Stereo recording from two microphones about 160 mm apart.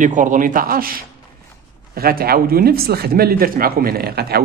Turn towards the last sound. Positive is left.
turn(degrees=-75)  # may be behind; listen again after turning